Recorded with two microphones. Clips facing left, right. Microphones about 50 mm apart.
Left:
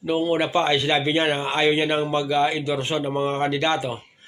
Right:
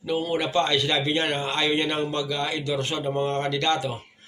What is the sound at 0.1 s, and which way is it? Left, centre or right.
Speech, left.